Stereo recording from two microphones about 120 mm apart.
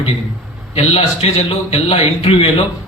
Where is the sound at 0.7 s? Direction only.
55° left (ahead or behind).